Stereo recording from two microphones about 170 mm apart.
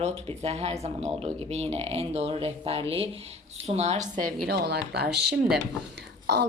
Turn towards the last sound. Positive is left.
turn(degrees=-80)